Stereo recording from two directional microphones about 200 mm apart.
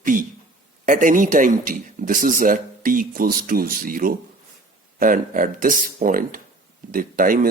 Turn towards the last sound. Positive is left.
turn(degrees=-45)  # may be behind; listen again after turning